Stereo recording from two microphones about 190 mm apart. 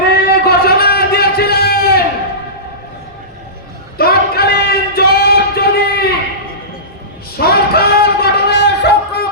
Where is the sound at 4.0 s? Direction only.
55° left (ahead or behind).